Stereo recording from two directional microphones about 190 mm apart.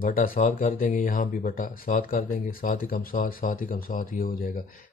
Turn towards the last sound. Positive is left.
turn(degrees=45)  # may be behind; listen again after turning